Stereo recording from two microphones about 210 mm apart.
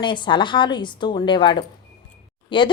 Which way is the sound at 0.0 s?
25° left (ahead or behind).